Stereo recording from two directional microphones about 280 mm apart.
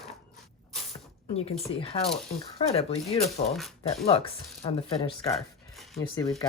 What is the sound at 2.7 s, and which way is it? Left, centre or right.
Speech, left.